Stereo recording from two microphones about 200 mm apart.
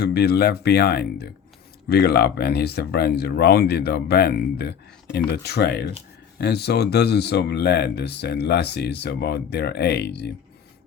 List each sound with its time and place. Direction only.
0.0 s speech: 55° left (ahead or behind)